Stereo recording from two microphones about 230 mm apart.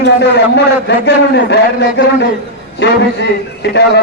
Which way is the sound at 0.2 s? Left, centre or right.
Left.